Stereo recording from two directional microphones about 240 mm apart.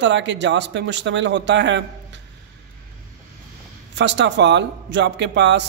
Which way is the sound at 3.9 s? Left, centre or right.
Right.